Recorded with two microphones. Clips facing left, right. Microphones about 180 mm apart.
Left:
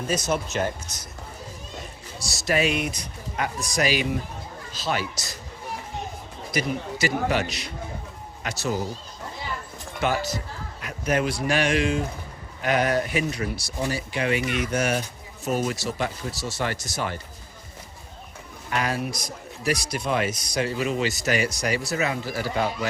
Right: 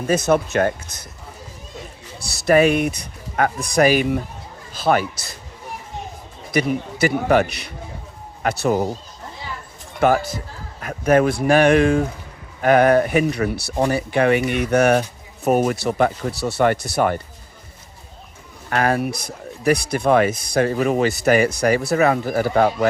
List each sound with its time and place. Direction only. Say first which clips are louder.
0.1 s speech: right 9 dB; 60° right (ahead or behind)
2.1 s speech: right 9 dB; 55° right (ahead or behind)
6.5 s speech: right 6 dB; 60° right (ahead or behind)
10.0 s speech: right 8 dB; 50° right (ahead or behind)
18.7 s speech: right 7 dB; 55° right (ahead or behind)